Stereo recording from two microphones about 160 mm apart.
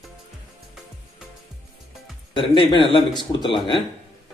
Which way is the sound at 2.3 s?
30° left (ahead or behind).